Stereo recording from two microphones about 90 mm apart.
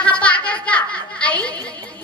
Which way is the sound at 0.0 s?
15° left (ahead or behind).